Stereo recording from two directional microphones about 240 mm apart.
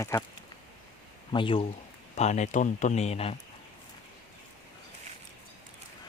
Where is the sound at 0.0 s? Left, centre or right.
Centre.